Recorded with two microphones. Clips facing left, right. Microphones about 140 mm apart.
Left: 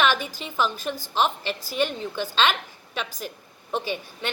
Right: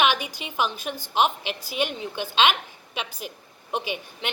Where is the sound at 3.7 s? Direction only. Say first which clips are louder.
Left 1 dB; 15° right (ahead or behind).